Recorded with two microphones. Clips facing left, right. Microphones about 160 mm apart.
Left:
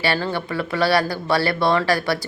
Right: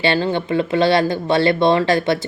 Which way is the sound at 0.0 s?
20° right (ahead or behind).